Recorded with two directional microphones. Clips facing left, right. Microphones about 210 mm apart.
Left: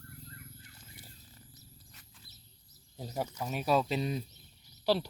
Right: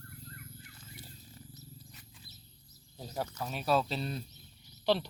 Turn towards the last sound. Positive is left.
turn(degrees=5)  # may be behind; listen again after turning